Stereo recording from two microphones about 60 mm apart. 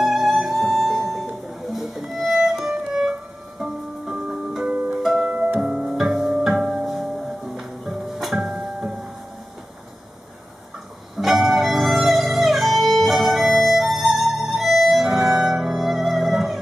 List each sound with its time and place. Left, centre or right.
0.0 s music: centre
5.2 s music: right
5.6 s music: centre
11.1 s music: centre